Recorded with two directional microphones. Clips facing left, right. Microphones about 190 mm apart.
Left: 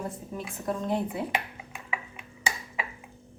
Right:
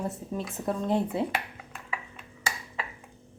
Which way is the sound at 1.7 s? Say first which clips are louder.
Left 2 dB; 10° left (ahead or behind).